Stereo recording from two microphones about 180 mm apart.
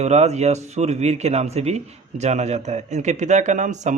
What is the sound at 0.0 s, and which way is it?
Speech, 40° right (ahead or behind).